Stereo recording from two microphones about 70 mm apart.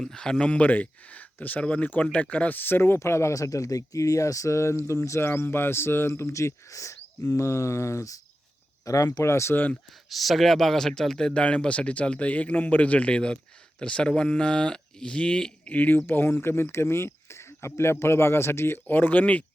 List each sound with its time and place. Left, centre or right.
0.0 s speech: centre; by 9.2 s left
9.2 s speech: left
10.1 s speech: centre
15.7 s speech: left